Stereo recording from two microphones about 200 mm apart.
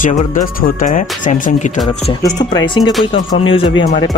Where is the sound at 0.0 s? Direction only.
45° left (ahead or behind).